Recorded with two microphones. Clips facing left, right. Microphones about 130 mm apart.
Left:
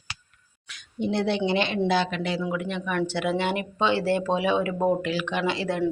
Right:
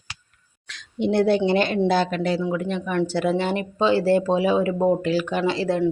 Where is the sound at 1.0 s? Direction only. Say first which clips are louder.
Right 6 dB; 55° right (ahead or behind).